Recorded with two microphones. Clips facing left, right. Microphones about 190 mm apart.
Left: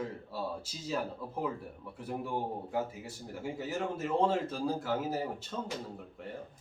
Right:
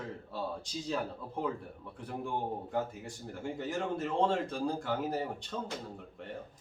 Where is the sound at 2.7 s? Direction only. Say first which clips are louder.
Even; 5° left (ahead or behind).